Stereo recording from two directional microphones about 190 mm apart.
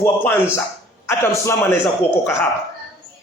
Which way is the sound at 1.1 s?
15° left (ahead or behind).